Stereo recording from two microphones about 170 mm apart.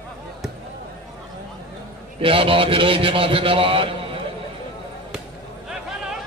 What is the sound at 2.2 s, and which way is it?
A man's voice, 30° right (ahead or behind).